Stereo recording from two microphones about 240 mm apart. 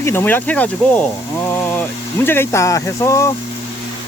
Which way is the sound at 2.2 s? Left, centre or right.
Centre.